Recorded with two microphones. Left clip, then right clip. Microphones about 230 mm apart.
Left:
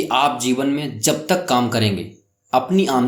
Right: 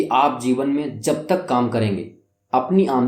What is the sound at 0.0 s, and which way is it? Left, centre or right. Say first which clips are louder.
Speech: even; left.